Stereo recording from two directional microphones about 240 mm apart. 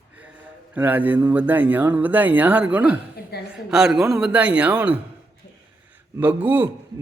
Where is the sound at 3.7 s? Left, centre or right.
Centre.